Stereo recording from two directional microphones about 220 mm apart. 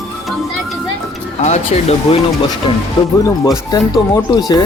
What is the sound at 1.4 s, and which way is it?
Speech, 30° left (ahead or behind).